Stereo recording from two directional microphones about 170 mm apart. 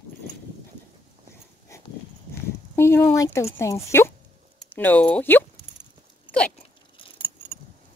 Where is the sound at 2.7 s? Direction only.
15° left (ahead or behind).